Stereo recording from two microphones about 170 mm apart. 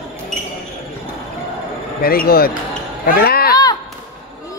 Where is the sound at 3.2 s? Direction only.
65° left (ahead or behind).